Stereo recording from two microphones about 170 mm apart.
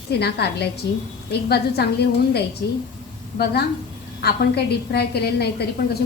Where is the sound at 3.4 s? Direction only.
65° left (ahead or behind).